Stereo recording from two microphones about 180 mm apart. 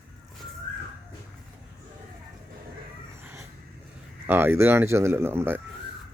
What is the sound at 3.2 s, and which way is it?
Vehicle, 15° right (ahead or behind).